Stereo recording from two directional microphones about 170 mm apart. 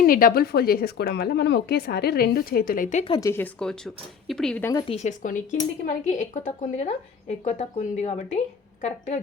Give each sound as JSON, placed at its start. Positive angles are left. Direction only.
{"t": 0.0, "sound": "speech", "side_deg": 55}
{"t": 3.1, "sound": "speech", "side_deg": 20}
{"t": 4.7, "sound": "speech", "side_deg": 20}
{"t": 4.9, "sound": "a woman's voice", "side_deg": 45}